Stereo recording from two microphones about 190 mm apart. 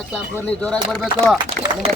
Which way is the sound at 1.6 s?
50° right (ahead or behind).